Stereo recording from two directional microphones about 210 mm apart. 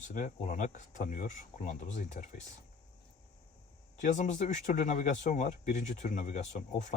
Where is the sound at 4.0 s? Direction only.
35° left (ahead or behind).